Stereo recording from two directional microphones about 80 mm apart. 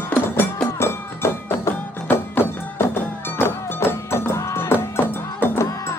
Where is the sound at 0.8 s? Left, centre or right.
Left.